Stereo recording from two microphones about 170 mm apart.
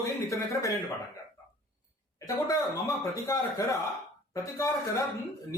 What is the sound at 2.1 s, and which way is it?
Speech, 20° left (ahead or behind).